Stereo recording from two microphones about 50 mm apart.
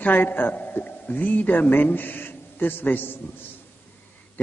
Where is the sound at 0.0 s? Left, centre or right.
Left.